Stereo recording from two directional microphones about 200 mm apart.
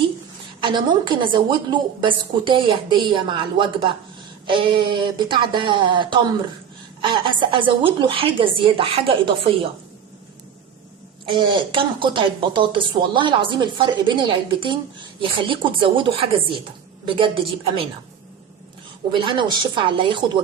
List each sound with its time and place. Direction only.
0.6 s a woman's voice: 25° right (ahead or behind)
11.3 s a woman's voice: 25° right (ahead or behind)
19.1 s a woman's voice: 25° right (ahead or behind)